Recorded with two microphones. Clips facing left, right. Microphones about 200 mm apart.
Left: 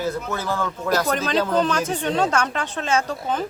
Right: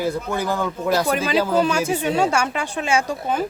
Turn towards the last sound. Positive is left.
turn(degrees=-10)  # may be behind; listen again after turning